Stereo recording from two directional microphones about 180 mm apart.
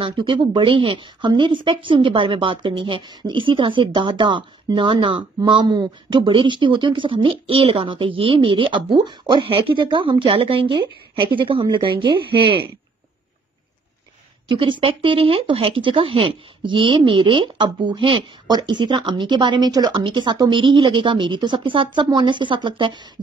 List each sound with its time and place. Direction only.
0.0 s speech: 25° right (ahead or behind)
14.5 s speech: 30° right (ahead or behind)